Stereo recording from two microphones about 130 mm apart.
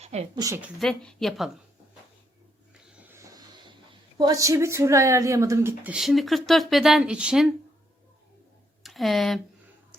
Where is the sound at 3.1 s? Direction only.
25° right (ahead or behind).